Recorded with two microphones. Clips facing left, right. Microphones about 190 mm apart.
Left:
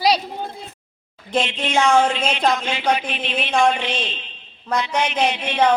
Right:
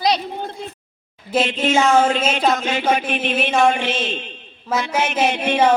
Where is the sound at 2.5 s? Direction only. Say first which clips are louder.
Right 2 dB; 45° right (ahead or behind).